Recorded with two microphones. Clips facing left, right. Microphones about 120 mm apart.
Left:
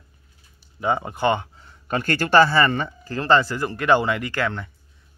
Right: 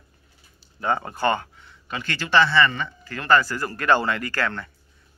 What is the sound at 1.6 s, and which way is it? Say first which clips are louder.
A man's voice: left 7 dB; 45° left (ahead or behind).